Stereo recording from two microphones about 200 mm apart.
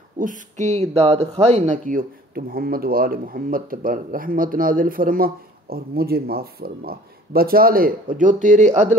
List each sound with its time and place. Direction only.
0.2 s speech: 40° right (ahead or behind)